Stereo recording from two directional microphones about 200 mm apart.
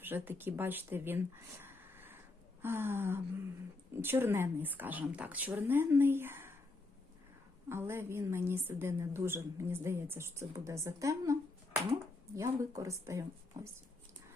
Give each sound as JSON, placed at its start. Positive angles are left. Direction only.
{"t": 0.0, "sound": "a woman's voice", "side_deg": -10}
{"t": 7.7, "sound": "a woman's voice", "side_deg": -10}
{"t": 12.4, "sound": "a woman's voice", "side_deg": -15}